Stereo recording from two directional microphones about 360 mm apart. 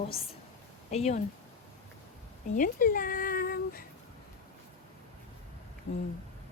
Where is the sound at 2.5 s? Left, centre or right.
Left.